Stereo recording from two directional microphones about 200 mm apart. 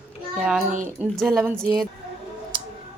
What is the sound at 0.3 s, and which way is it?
A child's voice, 5° right (ahead or behind).